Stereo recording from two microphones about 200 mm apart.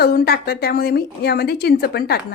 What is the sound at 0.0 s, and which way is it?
A woman's voice, 50° left (ahead or behind).